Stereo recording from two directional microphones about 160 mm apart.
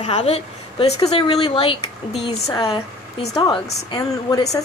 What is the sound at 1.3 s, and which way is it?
A woman's voice, 25° left (ahead or behind).